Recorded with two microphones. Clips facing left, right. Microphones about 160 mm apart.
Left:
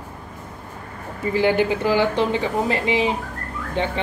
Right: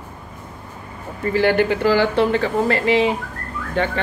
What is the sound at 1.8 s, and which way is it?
Speech, 15° left (ahead or behind).